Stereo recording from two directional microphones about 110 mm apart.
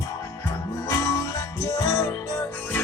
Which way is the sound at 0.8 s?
30° left (ahead or behind).